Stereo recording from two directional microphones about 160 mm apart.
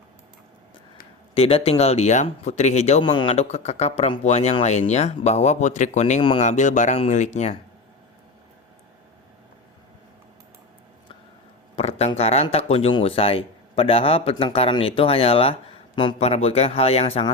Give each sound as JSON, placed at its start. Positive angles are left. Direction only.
{"t": 1.3, "sound": "speech", "side_deg": 35}
{"t": 3.0, "sound": "speech", "side_deg": 30}
{"t": 11.8, "sound": "speech", "side_deg": 40}